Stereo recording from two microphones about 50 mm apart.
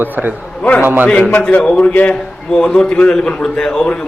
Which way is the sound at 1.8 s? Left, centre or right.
Left.